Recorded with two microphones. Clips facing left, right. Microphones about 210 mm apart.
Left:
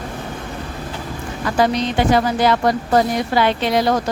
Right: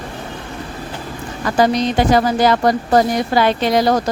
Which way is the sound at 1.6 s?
40° right (ahead or behind).